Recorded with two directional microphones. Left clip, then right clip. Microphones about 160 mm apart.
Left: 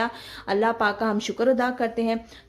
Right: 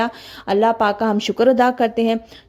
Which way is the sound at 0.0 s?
35° right (ahead or behind).